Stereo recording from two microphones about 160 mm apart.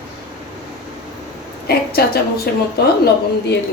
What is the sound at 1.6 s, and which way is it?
Speech, 75° left (ahead or behind).